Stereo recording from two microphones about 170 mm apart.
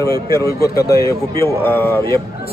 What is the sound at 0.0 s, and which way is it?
Speech, 15° left (ahead or behind).